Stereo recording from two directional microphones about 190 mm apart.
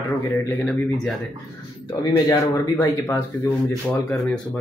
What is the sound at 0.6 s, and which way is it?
Speech, centre (ahead or behind).